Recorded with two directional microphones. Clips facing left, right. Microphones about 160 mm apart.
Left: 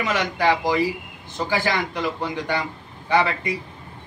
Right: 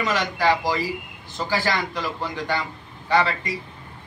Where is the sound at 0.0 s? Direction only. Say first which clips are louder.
Left 1 dB; 15° left (ahead or behind).